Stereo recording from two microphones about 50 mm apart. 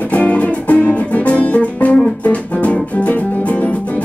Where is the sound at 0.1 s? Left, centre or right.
Left.